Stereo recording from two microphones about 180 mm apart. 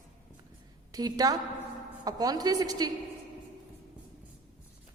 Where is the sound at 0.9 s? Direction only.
20° right (ahead or behind).